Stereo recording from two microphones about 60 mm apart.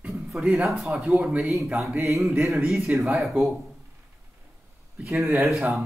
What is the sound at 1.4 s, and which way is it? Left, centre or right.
Speech, right.